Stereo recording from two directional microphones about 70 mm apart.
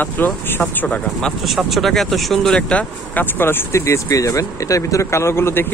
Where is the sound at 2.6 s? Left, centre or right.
Centre.